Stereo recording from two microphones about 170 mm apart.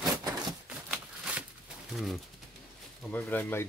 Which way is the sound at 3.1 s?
10° left (ahead or behind).